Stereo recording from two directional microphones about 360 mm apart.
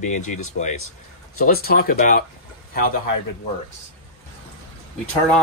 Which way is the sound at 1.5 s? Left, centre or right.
Left.